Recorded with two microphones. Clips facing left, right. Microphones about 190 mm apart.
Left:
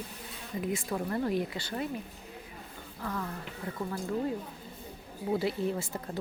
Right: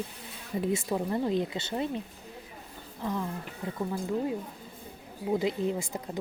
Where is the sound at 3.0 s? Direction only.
20° right (ahead or behind).